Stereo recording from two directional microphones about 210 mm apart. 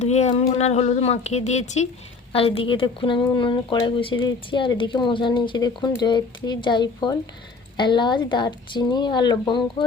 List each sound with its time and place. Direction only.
0.0 s speech: 30° left (ahead or behind)